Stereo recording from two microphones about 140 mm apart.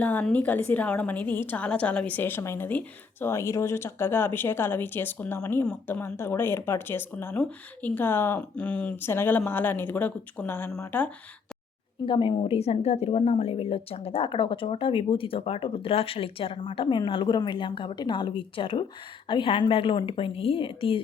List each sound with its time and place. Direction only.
0.0 s a woman's voice: 15° left (ahead or behind)
12.0 s a woman's voice: 35° left (ahead or behind)